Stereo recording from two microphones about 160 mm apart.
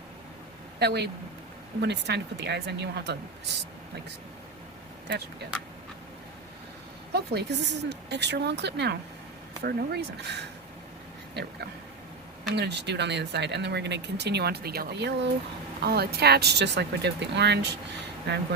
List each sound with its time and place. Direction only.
0.8 s speech: 90° right
5.0 s speech: 90° right
7.1 s speech: 90° right
12.5 s speech: 90° right
15.8 s speech: 80° right